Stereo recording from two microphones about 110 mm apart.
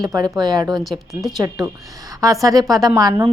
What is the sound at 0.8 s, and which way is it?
Speech, centre (ahead or behind).